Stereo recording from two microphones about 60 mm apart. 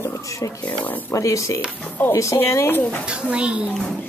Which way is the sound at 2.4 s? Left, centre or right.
Left.